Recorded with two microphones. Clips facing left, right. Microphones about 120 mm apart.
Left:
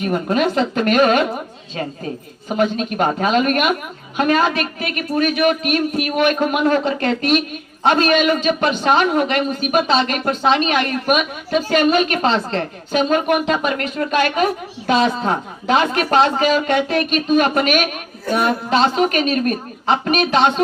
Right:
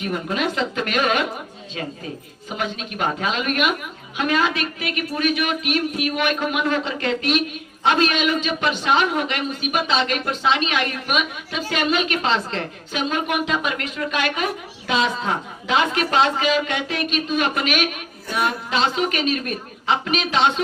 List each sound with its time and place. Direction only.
0.0 s a man's voice: 45° left (ahead or behind)
2.6 s a man's voice: 45° left (ahead or behind)